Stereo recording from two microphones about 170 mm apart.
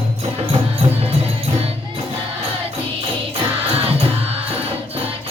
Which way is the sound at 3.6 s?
35° right (ahead or behind).